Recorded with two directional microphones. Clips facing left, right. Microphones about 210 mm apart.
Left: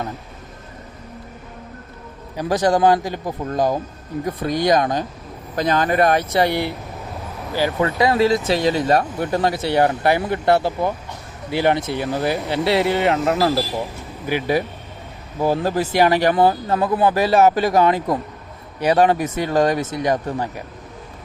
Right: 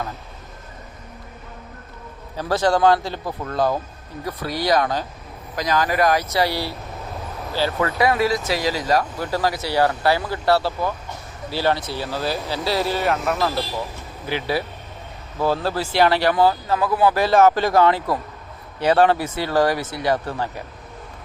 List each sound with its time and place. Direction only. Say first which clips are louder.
2.3 s speech: left 2 dB; 15° left (ahead or behind)
14.3 s speech: left 4 dB; 15° left (ahead or behind)